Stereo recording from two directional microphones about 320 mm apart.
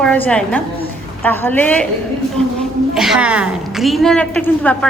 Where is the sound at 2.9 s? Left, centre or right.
Centre.